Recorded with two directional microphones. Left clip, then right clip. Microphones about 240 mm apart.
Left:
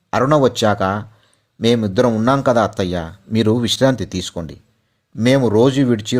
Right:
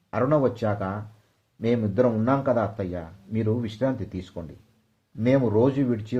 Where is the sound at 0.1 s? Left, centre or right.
Left.